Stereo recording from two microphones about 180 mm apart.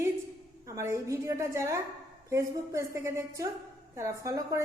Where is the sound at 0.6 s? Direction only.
15° right (ahead or behind).